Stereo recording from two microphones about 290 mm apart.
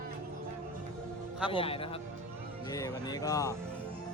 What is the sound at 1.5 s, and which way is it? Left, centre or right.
A man's voice, centre.